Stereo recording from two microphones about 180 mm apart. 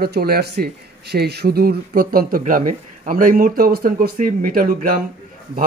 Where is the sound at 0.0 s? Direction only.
60° right (ahead or behind).